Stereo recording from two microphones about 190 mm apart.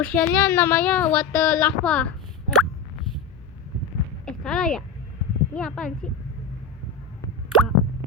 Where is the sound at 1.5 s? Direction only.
5° left (ahead or behind).